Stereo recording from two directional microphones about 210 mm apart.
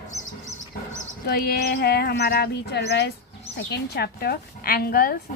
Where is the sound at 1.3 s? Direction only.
50° left (ahead or behind).